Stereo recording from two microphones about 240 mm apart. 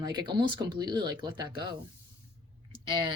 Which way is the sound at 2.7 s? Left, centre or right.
Centre.